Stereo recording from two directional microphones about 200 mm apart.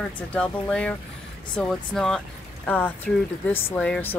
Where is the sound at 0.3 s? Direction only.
5° left (ahead or behind).